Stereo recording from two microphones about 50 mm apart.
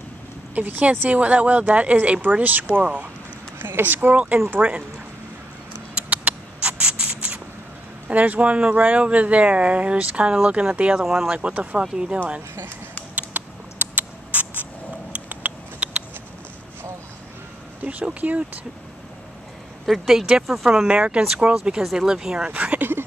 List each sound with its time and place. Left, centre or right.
0.6 s speech: right
3.5 s a sound: right
3.8 s speech: right
5.9 s a sound: right
6.8 s rodents: centre
8.1 s speech: right
11.0 s speech: centre
11.3 s speech: right
11.8 s speech: centre
13.1 s a sound: right
17.8 s speech: right
19.9 s speech: centre
22.5 s a sound: right